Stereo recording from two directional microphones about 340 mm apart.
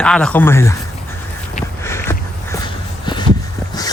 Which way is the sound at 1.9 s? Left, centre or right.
Centre.